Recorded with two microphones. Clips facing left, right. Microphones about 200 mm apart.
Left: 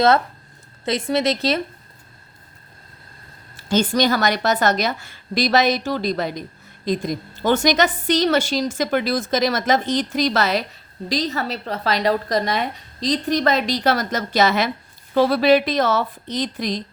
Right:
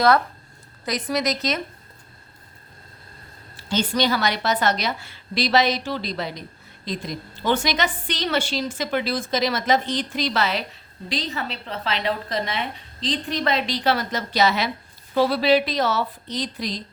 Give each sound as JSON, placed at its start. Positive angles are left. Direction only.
{"t": 0.9, "sound": "a woman's voice", "side_deg": 25}
{"t": 3.7, "sound": "a woman's voice", "side_deg": 45}